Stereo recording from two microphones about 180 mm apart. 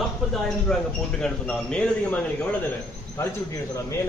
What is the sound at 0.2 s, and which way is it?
A man's voice, centre (ahead or behind).